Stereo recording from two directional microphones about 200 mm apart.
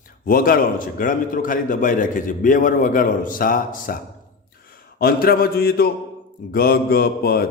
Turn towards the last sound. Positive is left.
turn(degrees=50)  # may be behind; listen again after turning